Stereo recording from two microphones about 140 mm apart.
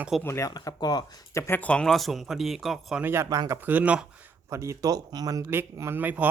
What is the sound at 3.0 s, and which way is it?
Speech, 15° right (ahead or behind).